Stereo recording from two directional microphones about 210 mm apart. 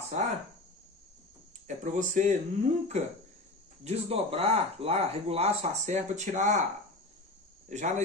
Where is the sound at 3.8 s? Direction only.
30° right (ahead or behind).